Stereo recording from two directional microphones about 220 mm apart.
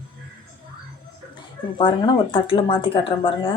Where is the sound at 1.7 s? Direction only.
20° left (ahead or behind).